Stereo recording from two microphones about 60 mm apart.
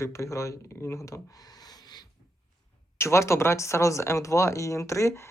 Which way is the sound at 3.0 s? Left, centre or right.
Left.